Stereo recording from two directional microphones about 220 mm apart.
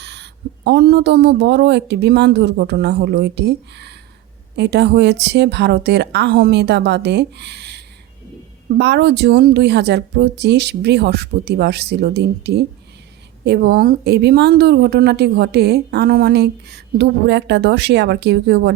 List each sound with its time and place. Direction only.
0.0 s a woman's voice: 50° right (ahead or behind)